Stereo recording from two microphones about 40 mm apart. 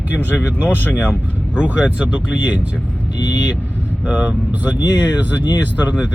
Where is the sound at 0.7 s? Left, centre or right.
Left.